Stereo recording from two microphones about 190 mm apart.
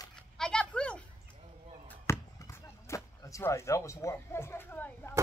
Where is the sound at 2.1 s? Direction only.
15° left (ahead or behind).